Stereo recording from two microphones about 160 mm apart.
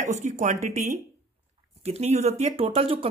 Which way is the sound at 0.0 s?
45° right (ahead or behind).